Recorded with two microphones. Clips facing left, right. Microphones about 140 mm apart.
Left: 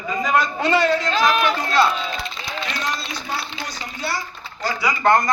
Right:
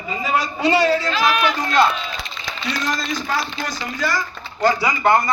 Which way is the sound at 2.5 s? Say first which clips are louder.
Right 3 dB; 90° right.